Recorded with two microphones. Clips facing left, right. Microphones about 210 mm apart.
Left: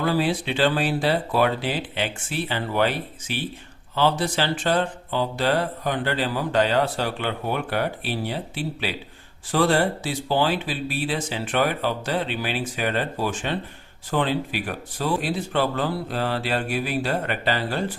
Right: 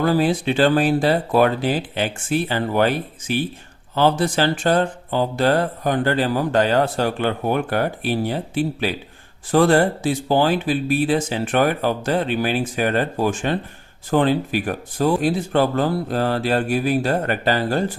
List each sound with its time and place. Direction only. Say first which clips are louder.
0.0 s speech: right 5 dB; 45° right (ahead or behind)